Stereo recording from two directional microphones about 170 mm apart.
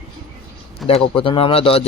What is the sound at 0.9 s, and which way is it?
Speech, 30° left (ahead or behind).